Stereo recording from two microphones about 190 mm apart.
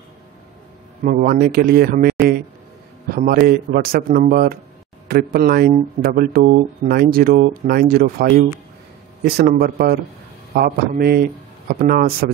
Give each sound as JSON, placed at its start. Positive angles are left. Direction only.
{"t": 1.0, "sound": "speech", "side_deg": -50}